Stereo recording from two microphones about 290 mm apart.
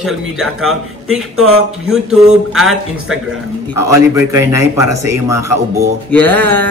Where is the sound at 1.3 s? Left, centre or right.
Right.